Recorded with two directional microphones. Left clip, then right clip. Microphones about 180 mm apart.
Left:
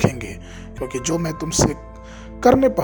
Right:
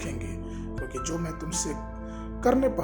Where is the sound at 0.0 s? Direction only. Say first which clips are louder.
Left 14 dB; 45° left (ahead or behind).